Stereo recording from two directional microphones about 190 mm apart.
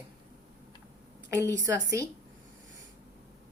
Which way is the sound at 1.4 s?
15° right (ahead or behind).